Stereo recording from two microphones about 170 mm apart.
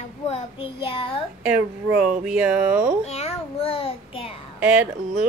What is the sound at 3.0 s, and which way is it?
Child singing, 40° left (ahead or behind).